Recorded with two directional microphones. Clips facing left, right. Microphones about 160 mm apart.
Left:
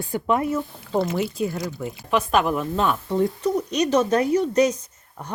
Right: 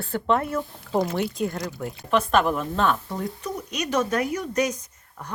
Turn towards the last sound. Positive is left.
turn(degrees=30)  # may be behind; listen again after turning